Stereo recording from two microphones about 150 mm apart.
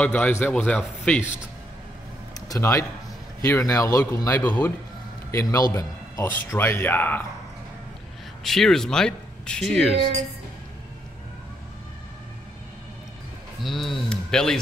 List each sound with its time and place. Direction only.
0.0 s speech: 10° left (ahead or behind)
2.4 s speech: 20° left (ahead or behind)
8.5 s speech: 5° left (ahead or behind)
13.6 s speech: centre (ahead or behind)